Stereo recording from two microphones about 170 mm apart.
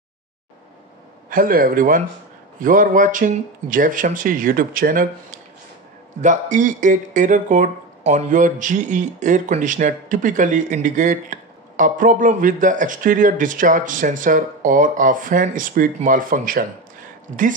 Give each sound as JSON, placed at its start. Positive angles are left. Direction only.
{"t": 1.3, "sound": "a man's voice", "side_deg": -55}